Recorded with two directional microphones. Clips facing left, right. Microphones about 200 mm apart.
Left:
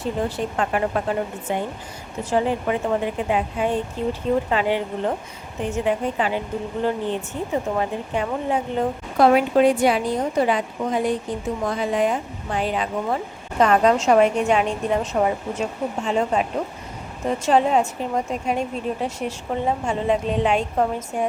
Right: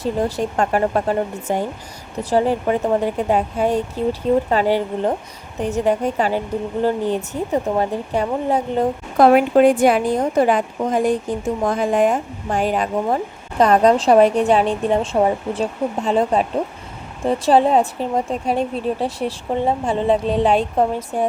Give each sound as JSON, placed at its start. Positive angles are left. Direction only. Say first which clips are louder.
{"t": 0.0, "sound": "a woman's voice", "louder": "right 4 dB", "side_deg": -40}
{"t": 9.1, "sound": "a woman's voice", "louder": "right 4 dB", "side_deg": -50}
{"t": 13.6, "sound": "a woman's voice", "louder": "right 3 dB", "side_deg": -35}